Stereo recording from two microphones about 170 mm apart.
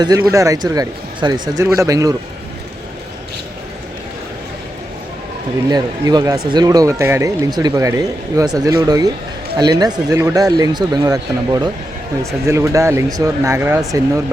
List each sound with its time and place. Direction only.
0.0 s speech: 20° right (ahead or behind)
5.6 s speech: 25° right (ahead or behind)